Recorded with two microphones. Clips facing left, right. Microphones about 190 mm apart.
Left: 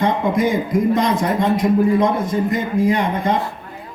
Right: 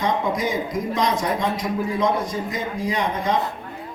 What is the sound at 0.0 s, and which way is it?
A man's voice, 55° left (ahead or behind).